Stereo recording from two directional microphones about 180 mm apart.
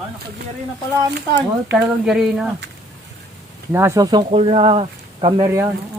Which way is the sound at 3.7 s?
15° right (ahead or behind).